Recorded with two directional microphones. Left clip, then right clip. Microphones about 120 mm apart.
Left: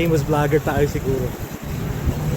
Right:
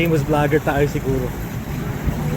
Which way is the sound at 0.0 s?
30° left (ahead or behind).